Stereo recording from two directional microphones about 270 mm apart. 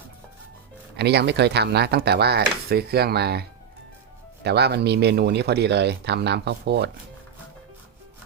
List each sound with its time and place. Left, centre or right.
0.9 s speech: right
4.4 s speech: right